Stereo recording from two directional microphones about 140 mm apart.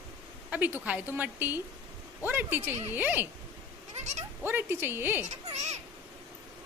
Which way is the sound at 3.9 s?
55° right (ahead or behind).